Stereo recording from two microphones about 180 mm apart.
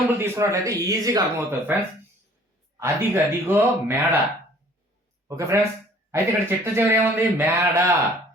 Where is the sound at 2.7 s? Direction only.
15° right (ahead or behind).